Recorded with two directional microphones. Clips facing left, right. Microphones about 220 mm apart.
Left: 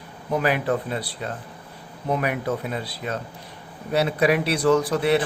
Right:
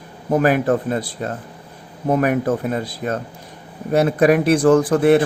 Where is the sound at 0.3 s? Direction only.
45° right (ahead or behind).